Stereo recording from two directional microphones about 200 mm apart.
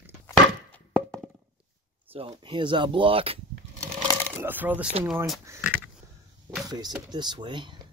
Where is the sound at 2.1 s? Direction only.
25° right (ahead or behind).